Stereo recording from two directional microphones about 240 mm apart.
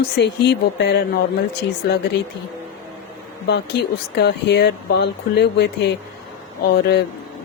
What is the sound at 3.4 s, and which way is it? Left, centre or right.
Speech, left.